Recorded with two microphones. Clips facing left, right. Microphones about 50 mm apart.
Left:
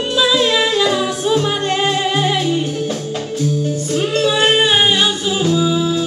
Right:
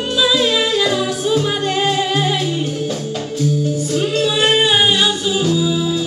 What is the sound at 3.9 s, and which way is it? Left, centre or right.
Music, centre.